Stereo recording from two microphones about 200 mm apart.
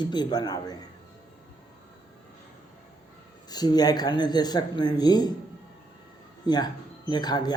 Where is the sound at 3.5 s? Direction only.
20° left (ahead or behind).